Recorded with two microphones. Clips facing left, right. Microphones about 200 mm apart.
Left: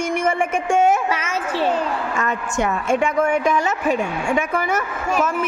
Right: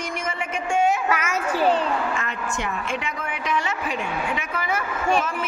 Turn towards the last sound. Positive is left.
turn(degrees=45)  # may be behind; listen again after turning